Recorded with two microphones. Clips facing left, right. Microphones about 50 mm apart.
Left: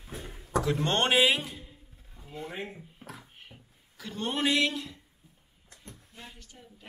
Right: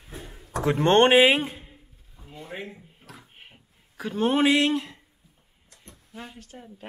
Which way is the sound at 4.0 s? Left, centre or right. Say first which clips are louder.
Right 8 dB; centre.